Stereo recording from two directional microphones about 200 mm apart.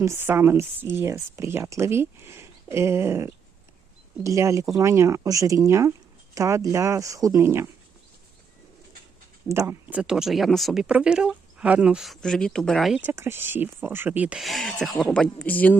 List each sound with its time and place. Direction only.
0.0 s speech: 10° right (ahead or behind)
9.5 s speech: 15° right (ahead or behind); by 15.8 s 10° left (ahead or behind)